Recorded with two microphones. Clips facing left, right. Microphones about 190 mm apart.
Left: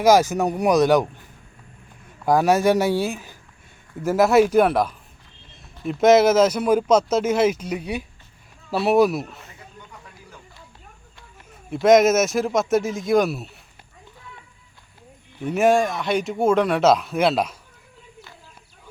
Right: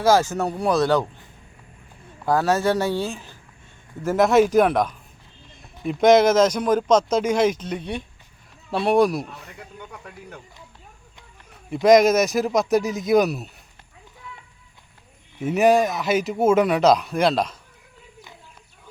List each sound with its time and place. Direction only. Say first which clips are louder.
0.0 s speech: left 2 dB; 15° left (ahead or behind)
2.2 s speech: left 3 dB; 15° left (ahead or behind)
11.7 s speech: even; centre (ahead or behind)
15.4 s speech: right 1 dB; centre (ahead or behind)